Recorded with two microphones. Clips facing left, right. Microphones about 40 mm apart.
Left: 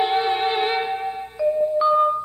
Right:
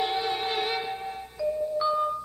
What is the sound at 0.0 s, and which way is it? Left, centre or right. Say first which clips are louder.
Music: left 8 dB; left.